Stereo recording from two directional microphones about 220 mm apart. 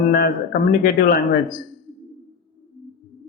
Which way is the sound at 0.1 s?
45° left (ahead or behind).